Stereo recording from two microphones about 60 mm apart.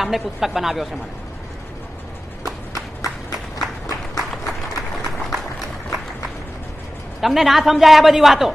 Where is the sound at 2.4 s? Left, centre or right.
Right.